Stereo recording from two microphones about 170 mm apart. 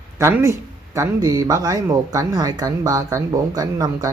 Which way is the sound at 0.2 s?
15° right (ahead or behind).